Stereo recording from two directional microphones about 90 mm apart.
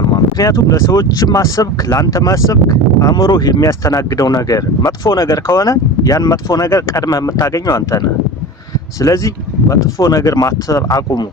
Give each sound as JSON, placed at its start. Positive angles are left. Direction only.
{"t": 0.1, "sound": "speech", "side_deg": 40}